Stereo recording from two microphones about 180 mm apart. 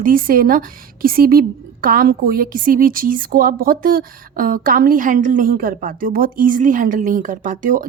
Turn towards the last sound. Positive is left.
turn(degrees=-50)  # may be behind; listen again after turning